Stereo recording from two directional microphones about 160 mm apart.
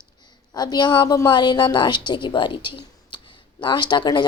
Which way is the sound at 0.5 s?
25° left (ahead or behind).